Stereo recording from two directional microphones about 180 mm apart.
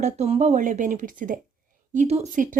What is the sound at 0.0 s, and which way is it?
A woman's voice, 40° right (ahead or behind).